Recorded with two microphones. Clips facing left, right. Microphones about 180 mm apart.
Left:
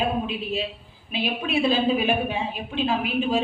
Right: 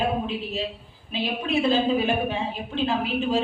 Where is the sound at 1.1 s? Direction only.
10° left (ahead or behind).